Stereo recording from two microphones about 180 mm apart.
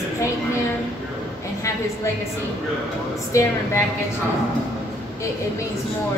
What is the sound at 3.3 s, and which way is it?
Speech, 15° left (ahead or behind).